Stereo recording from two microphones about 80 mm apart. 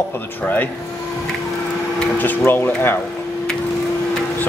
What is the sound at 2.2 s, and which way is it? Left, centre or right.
Speech, left.